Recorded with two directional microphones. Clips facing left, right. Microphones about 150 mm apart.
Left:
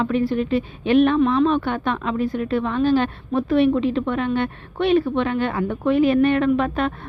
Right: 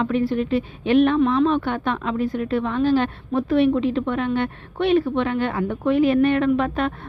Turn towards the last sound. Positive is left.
turn(degrees=35)  # may be behind; listen again after turning